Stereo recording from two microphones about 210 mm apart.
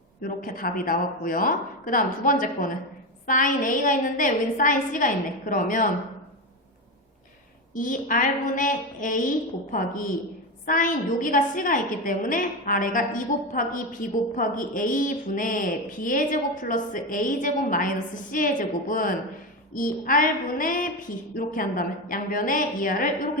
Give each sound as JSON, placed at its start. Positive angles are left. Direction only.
{"t": 0.2, "sound": "a woman's voice", "side_deg": 40}
{"t": 7.7, "sound": "a woman's voice", "side_deg": 40}